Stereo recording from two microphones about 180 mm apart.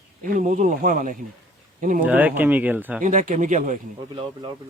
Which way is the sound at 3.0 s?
45° right (ahead or behind).